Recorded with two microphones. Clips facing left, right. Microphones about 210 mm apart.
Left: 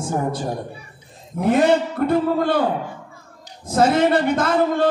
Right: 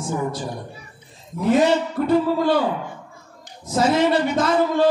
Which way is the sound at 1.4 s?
55° left (ahead or behind).